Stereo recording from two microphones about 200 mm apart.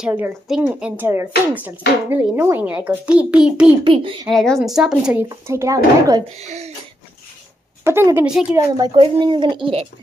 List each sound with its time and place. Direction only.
0.0 s a woman's voice: 5° right (ahead or behind)
3.8 s speech: 25° right (ahead or behind)
4.3 s a woman's voice: centre (ahead or behind)
5.3 s speech: 15° right (ahead or behind)
6.2 s a child's voice: 35° right (ahead or behind)
7.8 s speech: 10° right (ahead or behind)